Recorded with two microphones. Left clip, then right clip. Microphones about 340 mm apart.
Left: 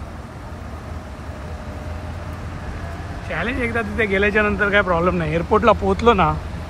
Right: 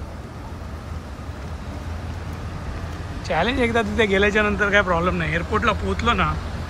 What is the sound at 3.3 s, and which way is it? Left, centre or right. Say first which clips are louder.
Speech: right 3 dB; centre.